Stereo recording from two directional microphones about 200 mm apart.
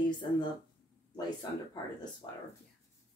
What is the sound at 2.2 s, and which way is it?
Speech, 25° left (ahead or behind).